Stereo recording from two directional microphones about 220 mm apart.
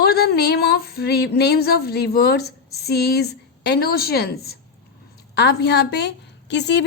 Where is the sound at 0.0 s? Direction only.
45° left (ahead or behind).